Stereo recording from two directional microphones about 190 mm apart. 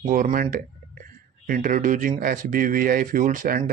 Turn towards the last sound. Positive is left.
turn(degrees=-45)  # may be behind; listen again after turning